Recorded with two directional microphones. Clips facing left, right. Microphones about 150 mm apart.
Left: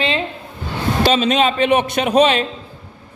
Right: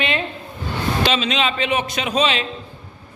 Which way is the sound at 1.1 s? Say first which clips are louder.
Left 9 dB; 50° left (ahead or behind).